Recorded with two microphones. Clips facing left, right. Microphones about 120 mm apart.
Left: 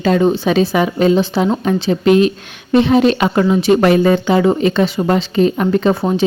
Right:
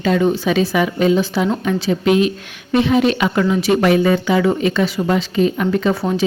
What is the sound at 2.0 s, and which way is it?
A woman's voice, 40° left (ahead or behind).